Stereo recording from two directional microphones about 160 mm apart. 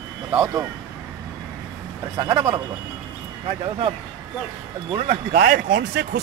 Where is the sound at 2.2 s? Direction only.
30° right (ahead or behind).